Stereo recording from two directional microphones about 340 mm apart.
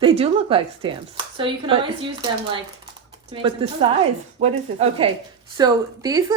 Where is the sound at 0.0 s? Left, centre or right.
Centre.